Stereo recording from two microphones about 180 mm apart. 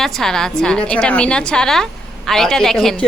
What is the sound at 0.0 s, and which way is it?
A woman's voice, centre (ahead or behind).